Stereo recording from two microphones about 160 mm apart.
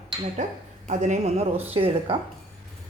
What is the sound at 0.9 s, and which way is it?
A woman's voice, 50° right (ahead or behind).